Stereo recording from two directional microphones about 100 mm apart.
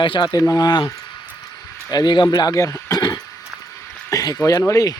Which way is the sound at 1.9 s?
45° left (ahead or behind).